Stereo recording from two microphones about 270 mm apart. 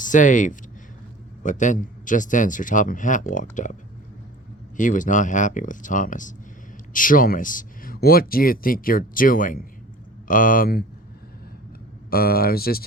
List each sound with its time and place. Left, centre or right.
0.0 s speech: left
4.8 s speech: left
12.1 s speech: left